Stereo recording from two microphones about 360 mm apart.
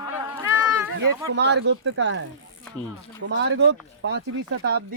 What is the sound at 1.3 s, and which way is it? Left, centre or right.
Speech, right.